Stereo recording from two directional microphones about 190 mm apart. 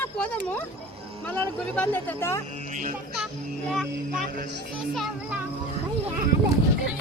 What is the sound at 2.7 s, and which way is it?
Speech, 40° right (ahead or behind).